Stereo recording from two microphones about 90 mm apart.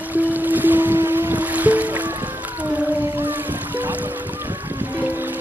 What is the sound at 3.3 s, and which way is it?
Music, 20° right (ahead or behind).